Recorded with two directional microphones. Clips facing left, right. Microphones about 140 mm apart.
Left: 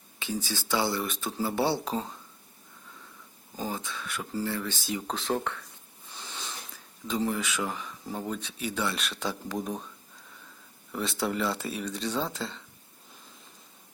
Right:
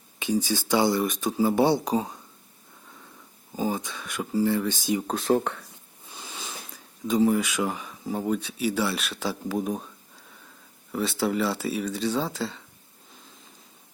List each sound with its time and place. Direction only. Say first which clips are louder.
0.2 s speech: right 8 dB; 15° right (ahead or behind)
3.5 s speech: right 6 dB; 15° right (ahead or behind)
5.4 s speech: right 4 dB; 35° right (ahead or behind)
6.1 s a sound: right 2 dB; 10° right (ahead or behind)
7.1 s speech: right 7 dB; 10° right (ahead or behind)
10.9 s speech: right 4 dB; centre (ahead or behind)